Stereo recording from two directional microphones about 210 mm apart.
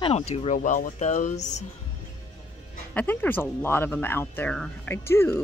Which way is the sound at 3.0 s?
10° left (ahead or behind).